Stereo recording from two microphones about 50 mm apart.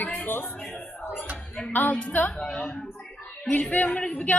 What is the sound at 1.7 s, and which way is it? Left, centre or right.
Speech, left.